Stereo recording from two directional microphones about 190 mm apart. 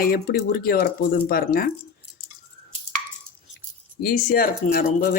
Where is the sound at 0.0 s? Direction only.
50° left (ahead or behind).